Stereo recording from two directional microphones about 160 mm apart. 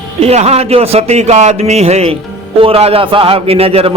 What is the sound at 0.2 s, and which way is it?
A man's voice, 40° right (ahead or behind).